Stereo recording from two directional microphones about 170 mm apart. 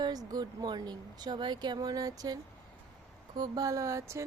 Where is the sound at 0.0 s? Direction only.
20° right (ahead or behind).